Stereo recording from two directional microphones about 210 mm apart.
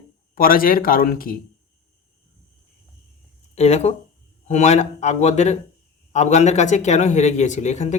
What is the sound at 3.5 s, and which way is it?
Speech, 30° left (ahead or behind).